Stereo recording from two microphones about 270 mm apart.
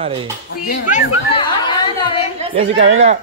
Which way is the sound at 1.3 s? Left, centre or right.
Centre.